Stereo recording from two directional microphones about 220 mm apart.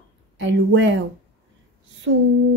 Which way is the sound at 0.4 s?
55° right (ahead or behind).